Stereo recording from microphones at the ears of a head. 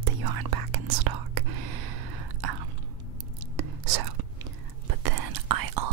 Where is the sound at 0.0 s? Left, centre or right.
Right.